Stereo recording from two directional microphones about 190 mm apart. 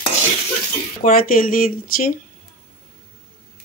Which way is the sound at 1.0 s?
50° left (ahead or behind).